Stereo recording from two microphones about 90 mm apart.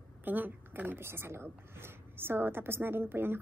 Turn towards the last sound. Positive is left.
turn(degrees=-25)  # may be behind; listen again after turning